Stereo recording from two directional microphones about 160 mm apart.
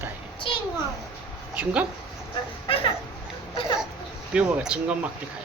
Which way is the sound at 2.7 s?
35° left (ahead or behind).